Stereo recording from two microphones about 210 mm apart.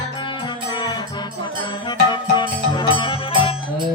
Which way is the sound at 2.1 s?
20° left (ahead or behind).